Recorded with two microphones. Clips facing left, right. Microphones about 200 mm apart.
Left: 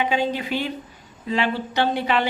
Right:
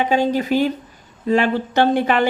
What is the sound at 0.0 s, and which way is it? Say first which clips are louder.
Speech: right 5 dB; 45° right (ahead or behind).